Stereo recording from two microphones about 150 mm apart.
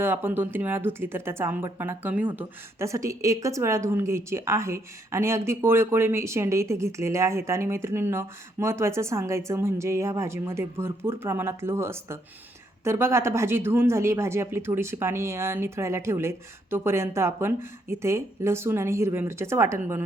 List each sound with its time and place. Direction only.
0.0 s speech: 15° right (ahead or behind)